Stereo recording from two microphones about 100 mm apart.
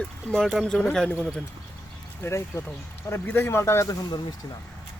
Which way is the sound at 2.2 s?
30° left (ahead or behind).